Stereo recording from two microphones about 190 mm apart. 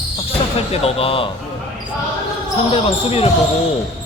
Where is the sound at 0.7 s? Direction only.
30° left (ahead or behind).